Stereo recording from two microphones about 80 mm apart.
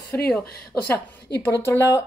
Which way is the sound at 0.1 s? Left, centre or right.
Left.